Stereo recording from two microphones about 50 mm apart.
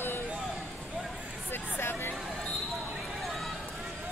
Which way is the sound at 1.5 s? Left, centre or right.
Left.